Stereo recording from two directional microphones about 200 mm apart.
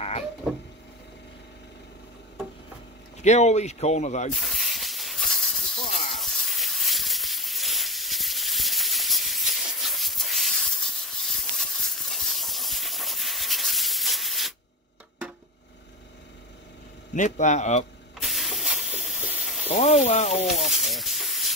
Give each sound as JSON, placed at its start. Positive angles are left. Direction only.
{"t": 3.2, "sound": "speech", "side_deg": 35}
{"t": 4.3, "sound": "snake", "side_deg": 0}
{"t": 17.1, "sound": "speech", "side_deg": 40}
{"t": 18.2, "sound": "steam", "side_deg": 0}
{"t": 19.7, "sound": "speech", "side_deg": 35}
{"t": 20.5, "sound": "hiss", "side_deg": 0}